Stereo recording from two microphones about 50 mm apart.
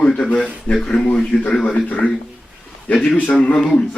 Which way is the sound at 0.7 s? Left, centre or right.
Centre.